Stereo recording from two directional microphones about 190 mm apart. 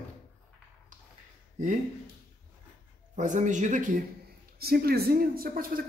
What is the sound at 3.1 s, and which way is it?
Speech, 40° right (ahead or behind).